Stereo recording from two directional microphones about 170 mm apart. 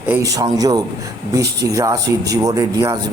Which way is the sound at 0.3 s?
20° right (ahead or behind).